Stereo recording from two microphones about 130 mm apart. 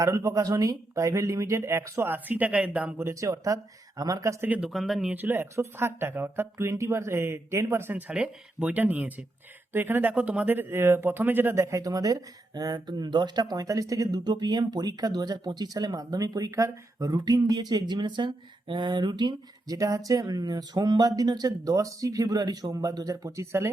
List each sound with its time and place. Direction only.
0.0 s speech: 25° right (ahead or behind)
4.4 s speech: 10° right (ahead or behind)
4.7 s speech: centre (ahead or behind)
5.1 s speech: 15° right (ahead or behind)